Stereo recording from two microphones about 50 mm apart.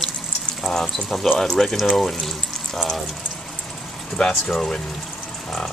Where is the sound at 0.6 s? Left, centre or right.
Centre.